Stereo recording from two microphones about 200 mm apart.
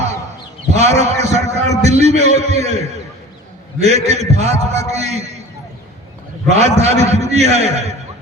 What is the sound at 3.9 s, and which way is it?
A man's voice, 35° right (ahead or behind).